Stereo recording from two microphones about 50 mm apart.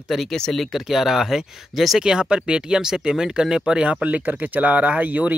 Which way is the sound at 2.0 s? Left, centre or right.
Centre.